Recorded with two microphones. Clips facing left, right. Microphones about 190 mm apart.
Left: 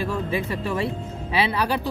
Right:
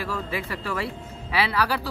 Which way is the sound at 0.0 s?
20° left (ahead or behind).